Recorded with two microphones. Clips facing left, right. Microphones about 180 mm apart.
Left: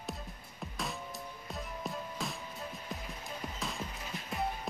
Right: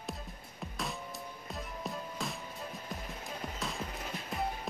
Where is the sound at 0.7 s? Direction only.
Centre (ahead or behind).